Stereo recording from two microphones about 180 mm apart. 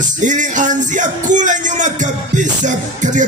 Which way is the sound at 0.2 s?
45° right (ahead or behind).